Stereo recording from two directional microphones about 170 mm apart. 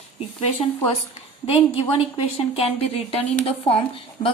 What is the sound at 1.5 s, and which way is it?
A woman's voice, 35° left (ahead or behind).